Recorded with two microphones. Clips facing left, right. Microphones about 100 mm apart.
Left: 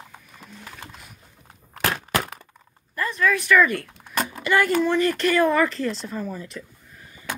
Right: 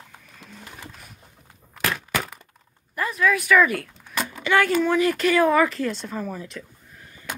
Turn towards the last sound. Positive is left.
turn(degrees=5)  # may be behind; listen again after turning